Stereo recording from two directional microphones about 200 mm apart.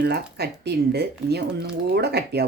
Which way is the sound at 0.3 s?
55° right (ahead or behind).